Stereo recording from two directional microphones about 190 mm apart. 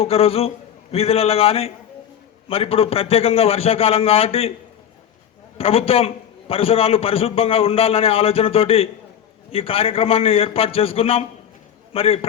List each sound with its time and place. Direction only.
0.0 s a man's voice: 30° left (ahead or behind)
5.5 s a man's voice: 30° left (ahead or behind)